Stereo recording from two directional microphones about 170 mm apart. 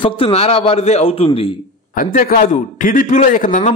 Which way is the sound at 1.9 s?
55° left (ahead or behind).